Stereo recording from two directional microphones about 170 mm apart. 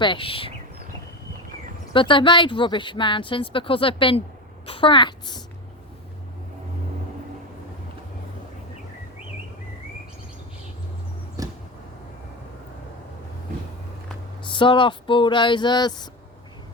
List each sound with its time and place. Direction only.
0.0 s speech: 30° left (ahead or behind)
1.9 s speech: 30° left (ahead or behind)
11.4 s a sound: 20° right (ahead or behind)
14.5 s speech: 30° left (ahead or behind)